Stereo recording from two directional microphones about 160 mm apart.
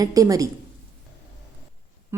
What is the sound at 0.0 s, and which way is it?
Speech, 20° right (ahead or behind).